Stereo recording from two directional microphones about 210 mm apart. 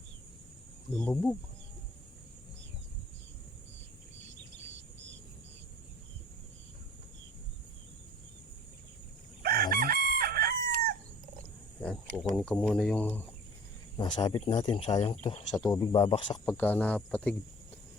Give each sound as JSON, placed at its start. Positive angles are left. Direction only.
{"t": 0.9, "sound": "speech", "side_deg": 5}
{"t": 9.4, "sound": "chicken", "side_deg": -45}
{"t": 12.1, "sound": "speech", "side_deg": 0}
{"t": 13.9, "sound": "speech", "side_deg": 20}
{"t": 15.1, "sound": "speech", "side_deg": 30}
{"t": 15.5, "sound": "speech", "side_deg": 20}
{"t": 16.5, "sound": "speech", "side_deg": 10}